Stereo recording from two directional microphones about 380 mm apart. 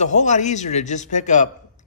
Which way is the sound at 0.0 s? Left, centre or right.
Centre.